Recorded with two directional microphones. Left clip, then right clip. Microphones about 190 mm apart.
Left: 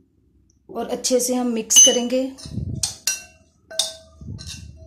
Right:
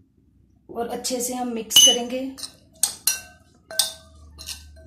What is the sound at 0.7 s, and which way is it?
A woman's voice, 55° left (ahead or behind).